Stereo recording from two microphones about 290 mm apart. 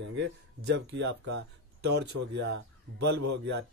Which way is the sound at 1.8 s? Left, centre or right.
Right.